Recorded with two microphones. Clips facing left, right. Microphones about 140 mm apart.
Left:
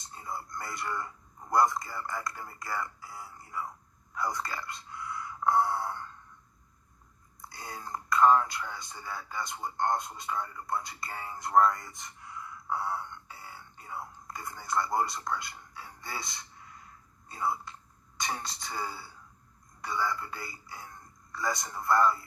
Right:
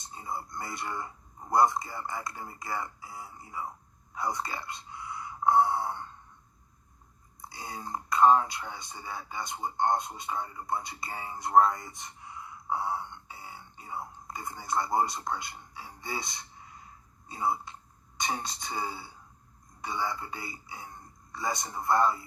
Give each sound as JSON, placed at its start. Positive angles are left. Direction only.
{"t": 0.0, "sound": "speech", "side_deg": -25}
{"t": 7.5, "sound": "a man's voice", "side_deg": -25}